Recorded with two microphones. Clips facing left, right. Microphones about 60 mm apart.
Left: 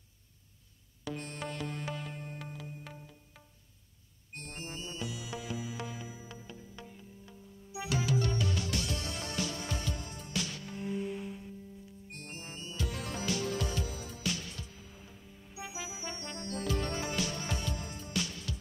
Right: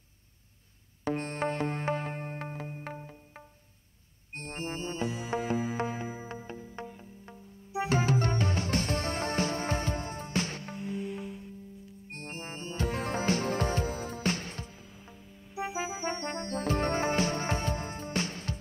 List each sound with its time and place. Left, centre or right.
1.0 s music: right
10.8 s music: centre
12.1 s music: right